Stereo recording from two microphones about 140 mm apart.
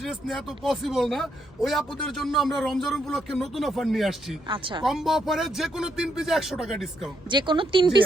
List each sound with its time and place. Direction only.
0.0 s speech: centre (ahead or behind)
4.4 s speech: 35° right (ahead or behind)
4.8 s speech: centre (ahead or behind)
7.3 s speech: 35° right (ahead or behind)